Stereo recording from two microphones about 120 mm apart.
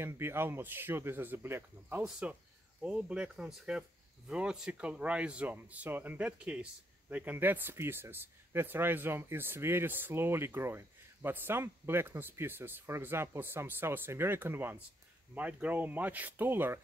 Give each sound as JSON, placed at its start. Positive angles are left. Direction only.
{"t": 0.0, "sound": "speech", "side_deg": -20}